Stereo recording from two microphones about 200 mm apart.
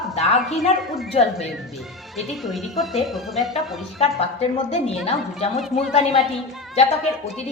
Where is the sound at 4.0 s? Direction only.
30° left (ahead or behind).